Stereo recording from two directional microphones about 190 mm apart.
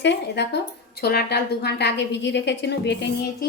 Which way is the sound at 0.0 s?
65° left (ahead or behind).